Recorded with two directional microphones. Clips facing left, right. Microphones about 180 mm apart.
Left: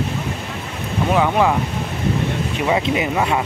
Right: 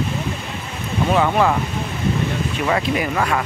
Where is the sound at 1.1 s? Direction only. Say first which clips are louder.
Even; 10° left (ahead or behind).